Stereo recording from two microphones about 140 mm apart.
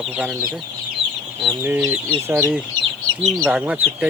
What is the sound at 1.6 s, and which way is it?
Speech, 15° right (ahead or behind).